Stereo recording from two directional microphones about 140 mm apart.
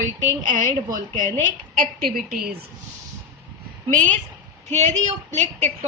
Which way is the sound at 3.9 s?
65° right (ahead or behind).